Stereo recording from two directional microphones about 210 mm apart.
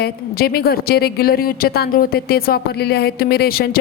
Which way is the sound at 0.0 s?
45° left (ahead or behind).